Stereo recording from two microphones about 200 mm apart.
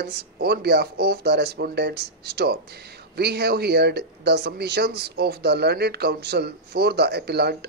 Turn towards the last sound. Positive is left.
turn(degrees=-55)  # may be behind; listen again after turning